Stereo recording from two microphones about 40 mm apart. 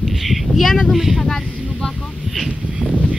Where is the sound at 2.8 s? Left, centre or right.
Left.